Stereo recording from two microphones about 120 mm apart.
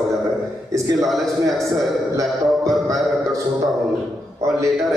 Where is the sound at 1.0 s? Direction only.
Centre (ahead or behind).